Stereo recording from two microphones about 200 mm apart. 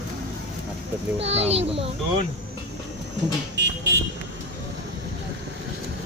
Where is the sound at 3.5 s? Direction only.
60° right (ahead or behind).